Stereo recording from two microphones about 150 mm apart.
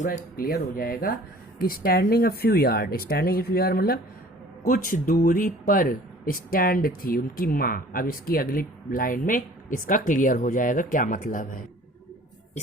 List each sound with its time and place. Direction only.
0.0 s speech: 65° left (ahead or behind); by 4.0 s 90° left
4.6 s speech: 65° left (ahead or behind)